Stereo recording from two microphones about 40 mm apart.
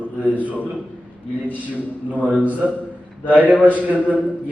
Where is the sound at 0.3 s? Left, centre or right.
Right.